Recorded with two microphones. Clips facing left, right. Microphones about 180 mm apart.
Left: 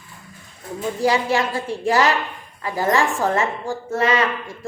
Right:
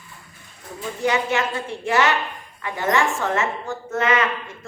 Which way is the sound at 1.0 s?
35° left (ahead or behind).